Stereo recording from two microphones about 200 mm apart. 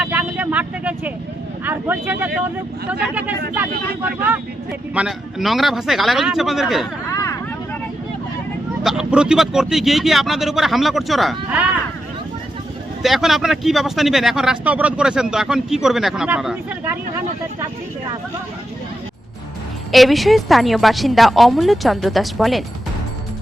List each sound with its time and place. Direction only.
0.0 s vehicle: 5° right (ahead or behind)
1.6 s speech: 10° right (ahead or behind)
4.9 s speech: centre (ahead or behind)
7.1 s vehicle: 15° left (ahead or behind)
8.8 s speech: centre (ahead or behind)
13.0 s speech: centre (ahead or behind)
19.9 s speech: centre (ahead or behind)